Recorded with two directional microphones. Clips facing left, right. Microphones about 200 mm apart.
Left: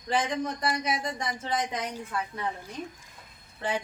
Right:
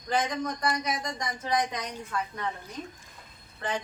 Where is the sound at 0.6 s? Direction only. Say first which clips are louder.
Even; 10° left (ahead or behind).